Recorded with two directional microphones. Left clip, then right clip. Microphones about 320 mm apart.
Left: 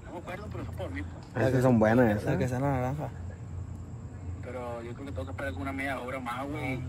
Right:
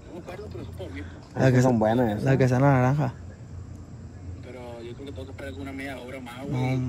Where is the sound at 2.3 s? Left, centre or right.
Right.